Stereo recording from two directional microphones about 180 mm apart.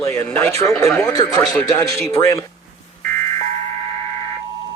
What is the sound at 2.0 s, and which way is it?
Speech, 15° left (ahead or behind).